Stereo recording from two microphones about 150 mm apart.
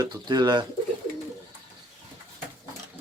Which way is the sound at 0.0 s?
30° right (ahead or behind).